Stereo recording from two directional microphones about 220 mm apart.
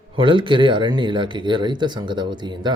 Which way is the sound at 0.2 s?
20° right (ahead or behind).